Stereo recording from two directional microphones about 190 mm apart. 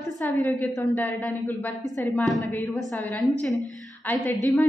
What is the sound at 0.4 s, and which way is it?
A woman's voice, 15° left (ahead or behind).